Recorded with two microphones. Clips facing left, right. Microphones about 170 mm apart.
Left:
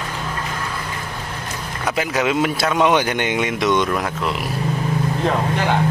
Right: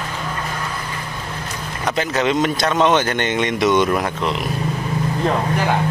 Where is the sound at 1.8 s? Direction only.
5° left (ahead or behind).